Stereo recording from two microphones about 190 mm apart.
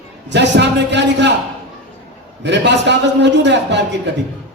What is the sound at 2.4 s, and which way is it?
A man's voice, 65° right (ahead or behind).